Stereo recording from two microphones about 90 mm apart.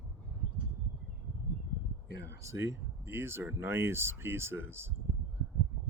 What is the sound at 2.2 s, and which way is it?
Speech, 35° right (ahead or behind).